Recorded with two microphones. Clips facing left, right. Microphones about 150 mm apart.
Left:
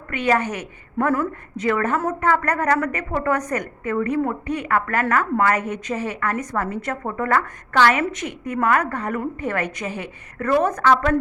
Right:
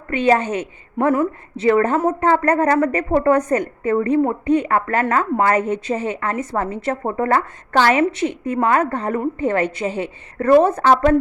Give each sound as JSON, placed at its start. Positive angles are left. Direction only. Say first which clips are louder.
{"t": 0.1, "sound": "a woman's voice", "louder": "right 4 dB", "side_deg": -30}